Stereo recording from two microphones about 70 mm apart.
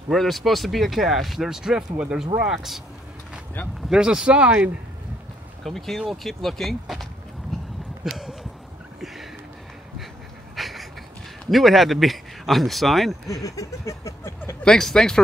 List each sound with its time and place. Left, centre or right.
0.1 s speech: centre
3.9 s speech: centre
5.6 s speech: centre
7.5 s livestock: centre
8.0 s a sound: centre
10.5 s a sound: centre
11.5 s speech: centre
13.3 s a sound: left
14.6 s speech: centre